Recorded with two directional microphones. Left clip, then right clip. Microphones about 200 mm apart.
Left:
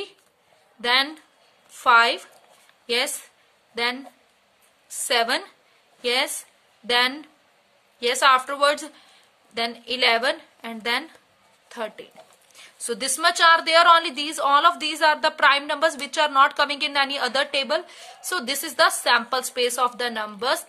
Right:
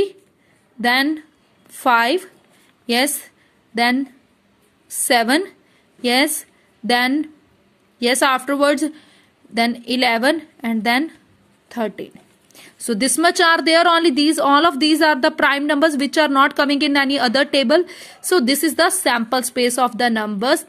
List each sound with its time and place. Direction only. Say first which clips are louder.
0.7 s a woman's voice: right 4 dB; 25° right (ahead or behind)
4.9 s a woman's voice: right 6 dB; 25° right (ahead or behind)